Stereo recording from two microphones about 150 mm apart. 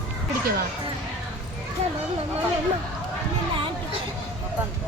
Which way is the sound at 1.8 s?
45° right (ahead or behind).